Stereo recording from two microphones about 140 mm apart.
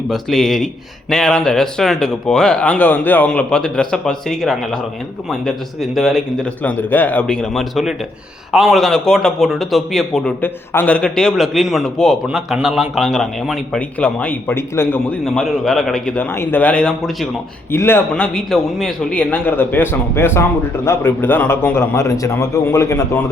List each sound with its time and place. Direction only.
0.1 s a man's voice: centre (ahead or behind)
15.2 s a man's voice: centre (ahead or behind)
17.7 s a man's voice: 15° left (ahead or behind)
18.1 s a man's voice: 5° left (ahead or behind); by 23.2 s 20° left (ahead or behind)